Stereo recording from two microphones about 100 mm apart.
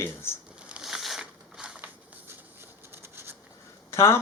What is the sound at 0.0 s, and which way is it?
Speech, 25° left (ahead or behind).